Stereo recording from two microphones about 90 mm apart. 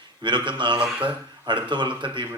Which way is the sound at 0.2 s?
60° right (ahead or behind).